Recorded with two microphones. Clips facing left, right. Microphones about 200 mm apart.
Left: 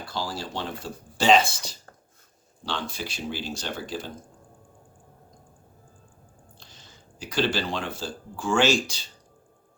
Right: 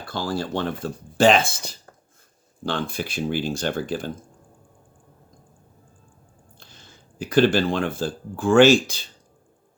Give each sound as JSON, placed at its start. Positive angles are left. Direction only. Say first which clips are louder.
{"t": 0.0, "sound": "speech", "louder": "right 5 dB", "side_deg": -55}
{"t": 6.6, "sound": "speech", "louder": "right 4 dB", "side_deg": -55}